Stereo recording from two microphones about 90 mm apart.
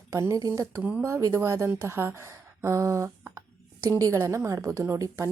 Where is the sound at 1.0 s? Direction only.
30° right (ahead or behind).